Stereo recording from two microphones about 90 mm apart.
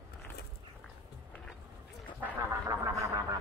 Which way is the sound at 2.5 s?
35° right (ahead or behind).